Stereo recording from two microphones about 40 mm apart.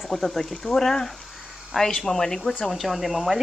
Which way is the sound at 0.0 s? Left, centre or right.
Centre.